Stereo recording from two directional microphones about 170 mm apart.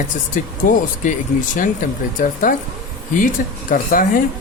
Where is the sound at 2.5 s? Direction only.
50° left (ahead or behind).